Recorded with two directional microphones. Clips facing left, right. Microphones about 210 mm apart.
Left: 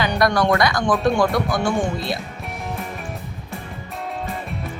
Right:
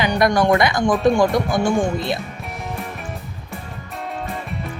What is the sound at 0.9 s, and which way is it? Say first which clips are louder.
Speech: right 4 dB; centre (ahead or behind).